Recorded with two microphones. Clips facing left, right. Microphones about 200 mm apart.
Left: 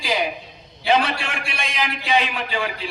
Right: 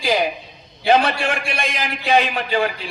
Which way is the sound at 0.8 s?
45° right (ahead or behind).